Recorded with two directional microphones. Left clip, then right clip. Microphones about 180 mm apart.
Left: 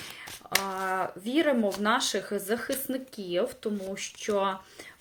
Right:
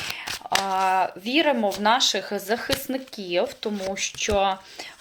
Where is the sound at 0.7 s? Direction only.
20° left (ahead or behind).